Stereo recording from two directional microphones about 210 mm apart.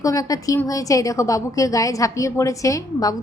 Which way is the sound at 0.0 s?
15° left (ahead or behind).